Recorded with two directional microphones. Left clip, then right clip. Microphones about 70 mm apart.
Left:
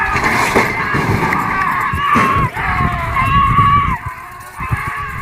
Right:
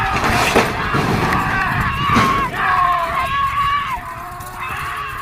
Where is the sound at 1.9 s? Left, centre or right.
Right.